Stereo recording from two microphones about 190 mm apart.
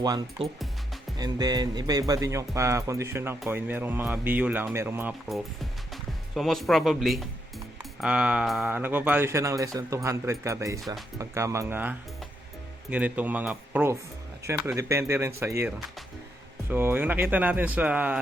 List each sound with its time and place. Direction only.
0.0 s speech: 20° right (ahead or behind)
5.9 s a man's voice: centre (ahead or behind)